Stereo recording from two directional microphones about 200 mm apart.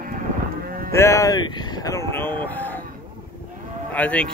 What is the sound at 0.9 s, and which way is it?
Speech, 15° left (ahead or behind).